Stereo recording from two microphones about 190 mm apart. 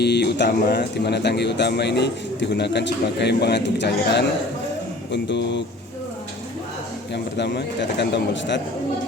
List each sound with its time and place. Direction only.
0.0 s a man's voice: 60° left (ahead or behind)
7.1 s a man's voice: 65° left (ahead or behind)